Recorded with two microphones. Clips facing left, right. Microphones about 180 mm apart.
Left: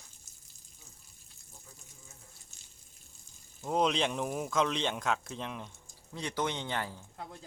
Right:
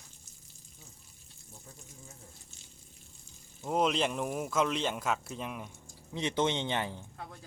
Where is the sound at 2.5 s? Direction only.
45° left (ahead or behind).